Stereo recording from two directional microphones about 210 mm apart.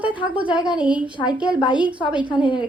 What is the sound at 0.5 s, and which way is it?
Speech, 5° right (ahead or behind).